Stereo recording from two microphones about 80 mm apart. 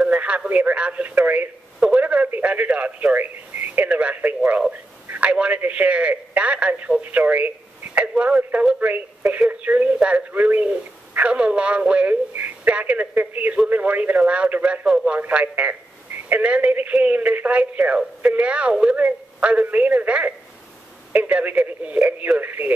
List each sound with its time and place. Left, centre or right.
0.0 s speech: centre
1.9 s radio: centre
4.4 s a man's voice: centre